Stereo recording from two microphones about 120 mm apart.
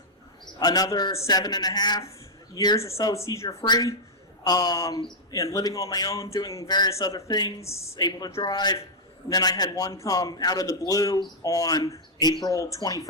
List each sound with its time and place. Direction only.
0.6 s a man's voice: 35° left (ahead or behind)